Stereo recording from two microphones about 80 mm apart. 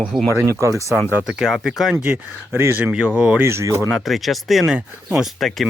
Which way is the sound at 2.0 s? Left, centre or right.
Right.